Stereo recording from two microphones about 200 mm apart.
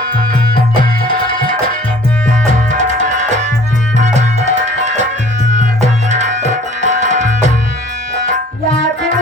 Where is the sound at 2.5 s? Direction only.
40° right (ahead or behind).